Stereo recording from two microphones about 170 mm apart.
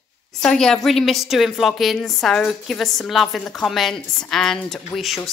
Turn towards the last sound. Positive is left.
turn(degrees=0)  # may be behind; listen again after turning